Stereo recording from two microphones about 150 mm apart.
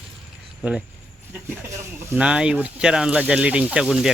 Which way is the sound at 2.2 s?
5° right (ahead or behind).